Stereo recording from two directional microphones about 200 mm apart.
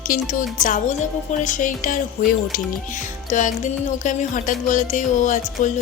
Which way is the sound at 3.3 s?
40° left (ahead or behind).